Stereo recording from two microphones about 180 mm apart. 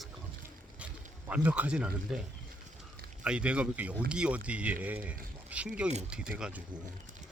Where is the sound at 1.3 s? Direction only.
10° right (ahead or behind).